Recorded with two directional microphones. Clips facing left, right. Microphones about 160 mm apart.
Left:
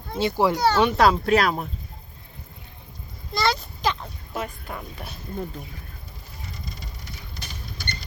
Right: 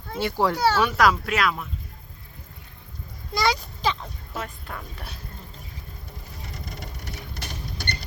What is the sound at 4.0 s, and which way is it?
Speech, 5° left (ahead or behind).